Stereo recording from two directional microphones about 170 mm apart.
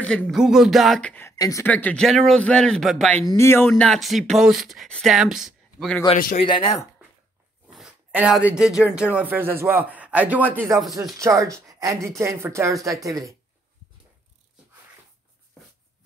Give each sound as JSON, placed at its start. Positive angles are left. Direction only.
{"t": 0.0, "sound": "speech", "side_deg": 5}
{"t": 3.3, "sound": "speech", "side_deg": 15}
{"t": 3.6, "sound": "speech", "side_deg": 5}
{"t": 6.1, "sound": "speech", "side_deg": 55}
{"t": 7.6, "sound": "speech", "side_deg": -5}